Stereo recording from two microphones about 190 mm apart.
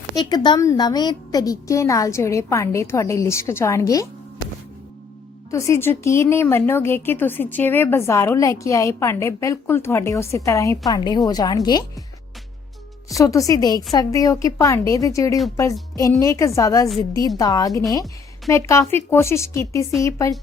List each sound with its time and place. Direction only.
0.2 s a woman's voice: 20° left (ahead or behind)
5.5 s a woman's voice: 15° left (ahead or behind)
13.1 s a woman's voice: 15° left (ahead or behind)